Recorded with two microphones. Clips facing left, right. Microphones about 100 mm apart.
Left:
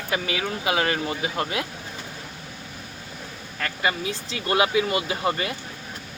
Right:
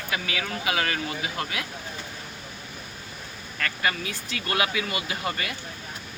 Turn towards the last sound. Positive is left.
turn(degrees=30)  # may be behind; listen again after turning